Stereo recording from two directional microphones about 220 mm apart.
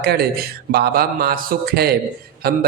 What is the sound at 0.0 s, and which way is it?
A man's voice, 45° right (ahead or behind).